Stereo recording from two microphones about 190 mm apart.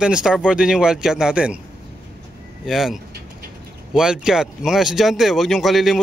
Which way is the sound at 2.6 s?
Centre (ahead or behind).